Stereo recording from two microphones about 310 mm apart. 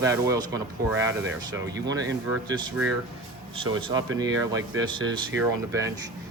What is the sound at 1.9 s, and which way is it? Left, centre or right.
Speech, right.